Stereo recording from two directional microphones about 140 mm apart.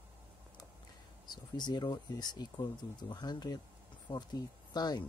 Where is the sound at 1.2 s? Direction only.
30° left (ahead or behind).